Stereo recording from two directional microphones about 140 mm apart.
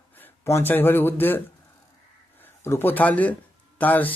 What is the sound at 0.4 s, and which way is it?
Speech, 15° left (ahead or behind).